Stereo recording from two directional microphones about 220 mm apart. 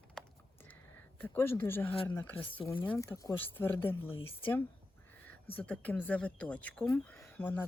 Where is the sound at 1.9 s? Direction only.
25° left (ahead or behind).